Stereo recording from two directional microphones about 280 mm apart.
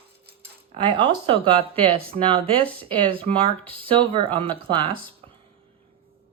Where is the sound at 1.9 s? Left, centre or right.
Right.